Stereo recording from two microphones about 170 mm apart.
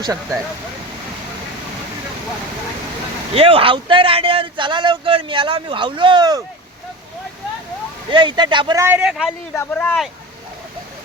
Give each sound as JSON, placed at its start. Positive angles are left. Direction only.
{"t": 0.0, "sound": "speech", "side_deg": -20}
{"t": 3.3, "sound": "speech", "side_deg": -35}
{"t": 8.1, "sound": "speech", "side_deg": -25}